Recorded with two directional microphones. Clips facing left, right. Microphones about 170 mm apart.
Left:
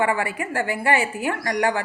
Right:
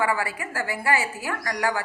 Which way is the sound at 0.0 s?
25° left (ahead or behind).